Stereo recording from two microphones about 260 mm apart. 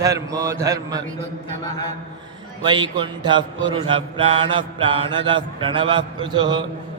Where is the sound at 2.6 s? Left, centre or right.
Centre.